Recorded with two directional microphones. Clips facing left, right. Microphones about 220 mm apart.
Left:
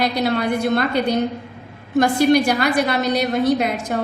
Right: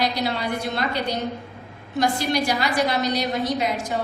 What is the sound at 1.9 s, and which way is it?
A woman's voice, 55° left (ahead or behind).